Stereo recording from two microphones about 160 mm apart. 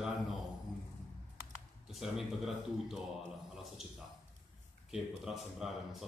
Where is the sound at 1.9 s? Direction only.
Centre (ahead or behind).